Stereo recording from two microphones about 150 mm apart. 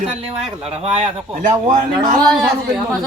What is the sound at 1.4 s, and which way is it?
Speech, 60° right (ahead or behind).